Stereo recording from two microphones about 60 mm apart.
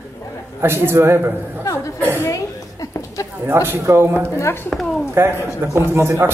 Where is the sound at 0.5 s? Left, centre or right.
Right.